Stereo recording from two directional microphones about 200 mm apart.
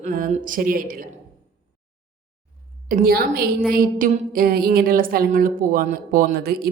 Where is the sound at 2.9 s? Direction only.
45° right (ahead or behind).